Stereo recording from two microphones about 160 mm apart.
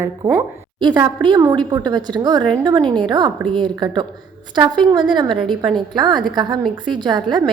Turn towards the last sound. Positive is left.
turn(degrees=-25)  # may be behind; listen again after turning